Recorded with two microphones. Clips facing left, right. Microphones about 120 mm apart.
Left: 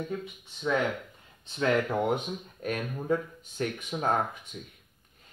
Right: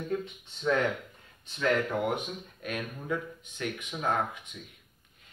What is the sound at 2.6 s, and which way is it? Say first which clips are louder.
Speech: left 4 dB; 35° left (ahead or behind).